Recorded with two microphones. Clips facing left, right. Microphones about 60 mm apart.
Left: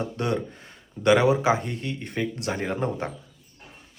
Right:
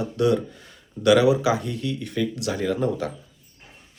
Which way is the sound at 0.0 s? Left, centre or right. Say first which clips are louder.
Right 5 dB; left.